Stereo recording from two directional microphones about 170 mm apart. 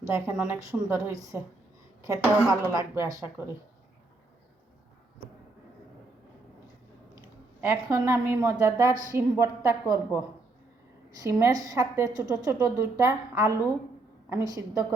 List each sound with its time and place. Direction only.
0.1 s a woman's voice: 10° right (ahead or behind)
7.6 s a woman's voice: 15° right (ahead or behind)
11.1 s a woman's voice: 15° right (ahead or behind)